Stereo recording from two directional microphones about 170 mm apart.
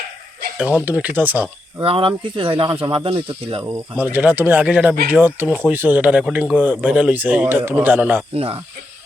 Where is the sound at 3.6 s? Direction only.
15° right (ahead or behind).